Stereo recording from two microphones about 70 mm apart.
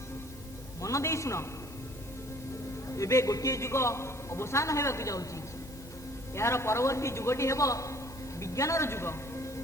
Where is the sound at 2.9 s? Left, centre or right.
Left.